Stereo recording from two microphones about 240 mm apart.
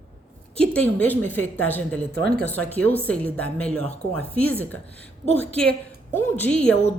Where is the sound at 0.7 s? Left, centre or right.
Centre.